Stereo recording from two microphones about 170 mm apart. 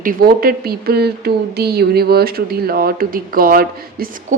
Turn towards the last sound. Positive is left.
turn(degrees=-60)  # may be behind; listen again after turning